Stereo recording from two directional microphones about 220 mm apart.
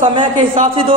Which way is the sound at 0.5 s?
25° right (ahead or behind).